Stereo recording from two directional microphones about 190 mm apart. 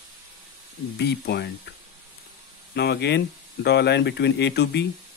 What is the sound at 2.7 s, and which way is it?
Speech, 60° left (ahead or behind).